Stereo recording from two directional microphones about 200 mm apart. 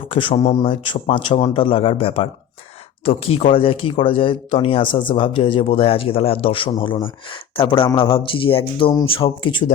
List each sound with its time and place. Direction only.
0.1 s speech: 25° left (ahead or behind)